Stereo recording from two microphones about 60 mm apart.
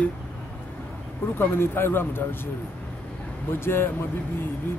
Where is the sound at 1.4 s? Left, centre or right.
Left.